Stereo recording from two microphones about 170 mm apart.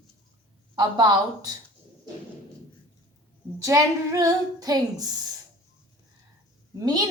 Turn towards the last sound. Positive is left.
turn(degrees=-25)  # may be behind; listen again after turning